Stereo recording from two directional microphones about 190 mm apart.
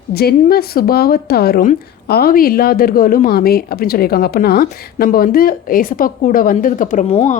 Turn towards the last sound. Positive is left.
turn(degrees=35)  # may be behind; listen again after turning